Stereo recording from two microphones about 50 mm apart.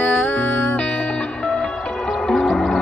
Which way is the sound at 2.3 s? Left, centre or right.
Centre.